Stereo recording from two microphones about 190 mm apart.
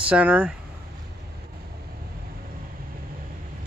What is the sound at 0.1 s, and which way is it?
Speech, 5° right (ahead or behind).